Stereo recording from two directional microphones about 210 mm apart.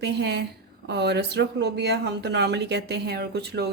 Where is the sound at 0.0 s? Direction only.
55° right (ahead or behind).